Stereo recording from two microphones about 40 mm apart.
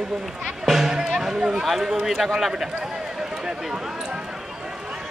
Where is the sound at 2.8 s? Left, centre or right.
Centre.